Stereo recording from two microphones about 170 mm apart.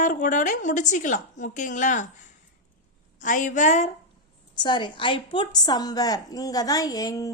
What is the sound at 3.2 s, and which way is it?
Speech, 50° left (ahead or behind).